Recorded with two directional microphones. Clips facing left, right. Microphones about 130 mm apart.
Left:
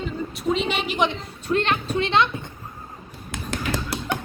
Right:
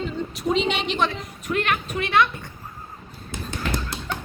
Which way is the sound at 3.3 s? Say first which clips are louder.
Left 1 dB; 90° left.